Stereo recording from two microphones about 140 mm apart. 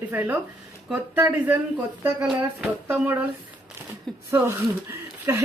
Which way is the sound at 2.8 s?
15° right (ahead or behind).